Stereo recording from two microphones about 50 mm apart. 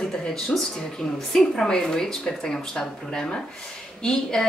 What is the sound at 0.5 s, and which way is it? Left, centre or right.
A woman's voice, centre.